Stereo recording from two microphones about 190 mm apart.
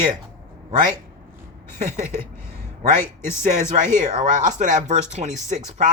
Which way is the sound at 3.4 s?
40° right (ahead or behind).